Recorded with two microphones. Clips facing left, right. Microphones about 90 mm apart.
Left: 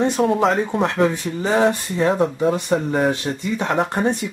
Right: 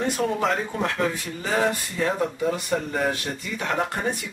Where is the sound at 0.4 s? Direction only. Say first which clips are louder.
Left 6 dB; 25° left (ahead or behind).